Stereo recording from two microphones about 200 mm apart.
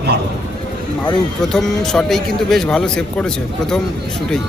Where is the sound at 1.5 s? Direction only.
5° left (ahead or behind).